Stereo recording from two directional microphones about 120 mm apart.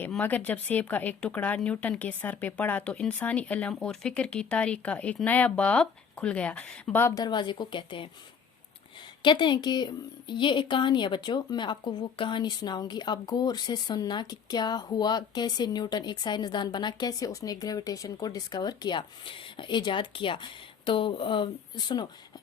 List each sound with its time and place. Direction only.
0.2 s speech: 15° left (ahead or behind)
7.0 s a woman's voice: 30° left (ahead or behind); by 8.1 s 45° left (ahead or behind)
9.2 s a woman's voice: 40° left (ahead or behind)